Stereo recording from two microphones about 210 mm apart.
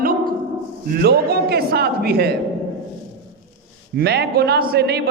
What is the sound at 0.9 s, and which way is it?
A man's voice, 45° right (ahead or behind).